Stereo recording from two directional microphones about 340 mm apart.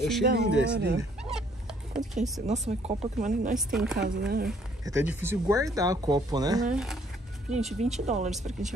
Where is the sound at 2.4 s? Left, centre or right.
Centre.